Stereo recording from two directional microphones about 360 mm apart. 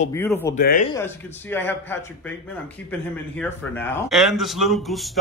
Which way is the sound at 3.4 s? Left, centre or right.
Centre.